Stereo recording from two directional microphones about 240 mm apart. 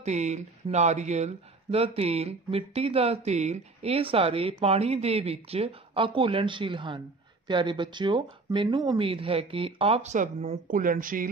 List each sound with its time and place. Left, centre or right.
0.0 s speech: right